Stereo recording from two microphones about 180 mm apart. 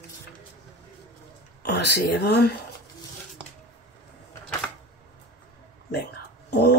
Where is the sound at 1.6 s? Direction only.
70° left (ahead or behind).